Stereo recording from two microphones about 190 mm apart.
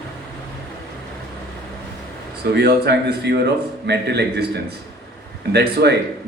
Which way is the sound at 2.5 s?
60° right (ahead or behind).